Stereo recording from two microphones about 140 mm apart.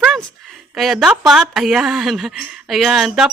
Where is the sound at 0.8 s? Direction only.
Centre (ahead or behind).